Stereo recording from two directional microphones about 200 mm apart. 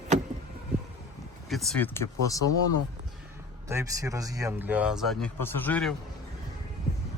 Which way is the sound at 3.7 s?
15° right (ahead or behind).